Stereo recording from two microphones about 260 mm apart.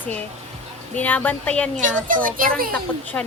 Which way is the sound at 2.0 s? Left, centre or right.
Right.